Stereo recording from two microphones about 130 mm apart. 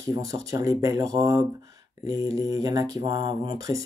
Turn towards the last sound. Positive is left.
turn(degrees=-25)  # may be behind; listen again after turning